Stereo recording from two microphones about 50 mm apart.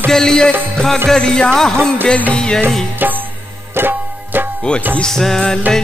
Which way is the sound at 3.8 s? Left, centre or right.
Right.